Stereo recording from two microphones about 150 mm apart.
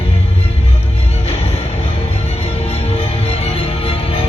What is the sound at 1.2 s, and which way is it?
Music, 45° left (ahead or behind).